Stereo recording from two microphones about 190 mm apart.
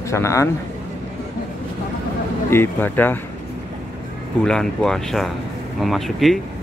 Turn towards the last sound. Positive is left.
turn(degrees=0)  # may be behind; listen again after turning